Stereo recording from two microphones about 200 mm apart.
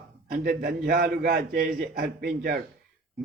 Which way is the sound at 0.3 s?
50° right (ahead or behind).